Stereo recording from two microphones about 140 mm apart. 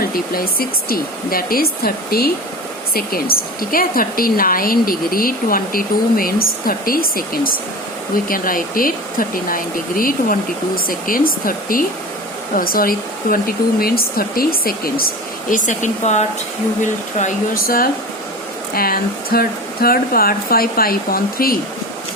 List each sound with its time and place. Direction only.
0.0 s a woman's voice: 90° left; by 16.2 s 60° left (ahead or behind)
17.2 s a woman's voice: 75° left (ahead or behind); by 21.6 s 90° left